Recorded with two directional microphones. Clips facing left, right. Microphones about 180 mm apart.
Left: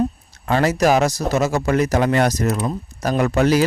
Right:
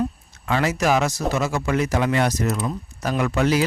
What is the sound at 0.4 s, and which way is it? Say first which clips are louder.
A man's voice: left 4 dB; 40° left (ahead or behind).